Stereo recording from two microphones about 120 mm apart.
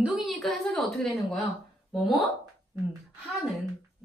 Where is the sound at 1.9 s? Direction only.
Centre (ahead or behind).